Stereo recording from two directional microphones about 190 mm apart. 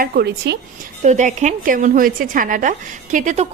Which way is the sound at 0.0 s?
60° right (ahead or behind).